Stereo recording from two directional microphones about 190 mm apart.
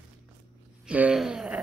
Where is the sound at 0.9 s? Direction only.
5° right (ahead or behind).